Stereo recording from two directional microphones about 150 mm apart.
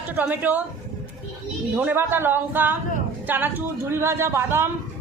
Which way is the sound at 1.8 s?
15° right (ahead or behind).